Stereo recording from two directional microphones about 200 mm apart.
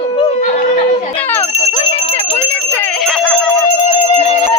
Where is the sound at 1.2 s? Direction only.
10° left (ahead or behind).